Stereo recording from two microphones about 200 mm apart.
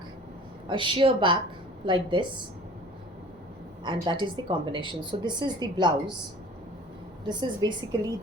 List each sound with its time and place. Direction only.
0.7 s a woman's voice: 25° right (ahead or behind)
3.8 s a woman's voice: 20° right (ahead or behind)
7.3 s a woman's voice: 20° right (ahead or behind)